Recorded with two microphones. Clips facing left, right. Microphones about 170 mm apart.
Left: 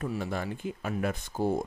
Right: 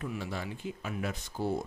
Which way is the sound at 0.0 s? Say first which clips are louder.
Left 4 dB; 45° left (ahead or behind).